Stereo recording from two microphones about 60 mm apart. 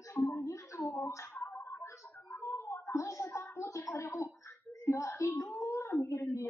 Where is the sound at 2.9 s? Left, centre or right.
Left.